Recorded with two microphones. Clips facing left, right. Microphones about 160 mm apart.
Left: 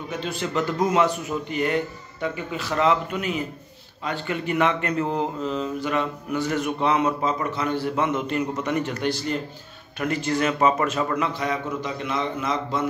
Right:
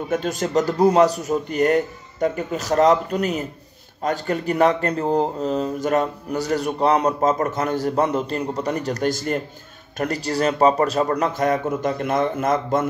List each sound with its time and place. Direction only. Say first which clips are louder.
0.1 s a man's voice: right 6 dB; 45° right (ahead or behind)